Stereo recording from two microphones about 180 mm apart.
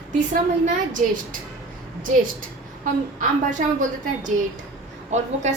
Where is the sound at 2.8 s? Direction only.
45° right (ahead or behind).